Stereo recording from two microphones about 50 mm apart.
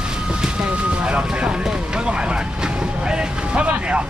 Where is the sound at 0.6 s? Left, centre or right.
Right.